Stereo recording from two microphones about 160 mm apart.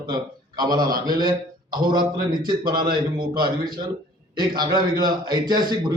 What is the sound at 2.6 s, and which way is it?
Speech, 65° right (ahead or behind).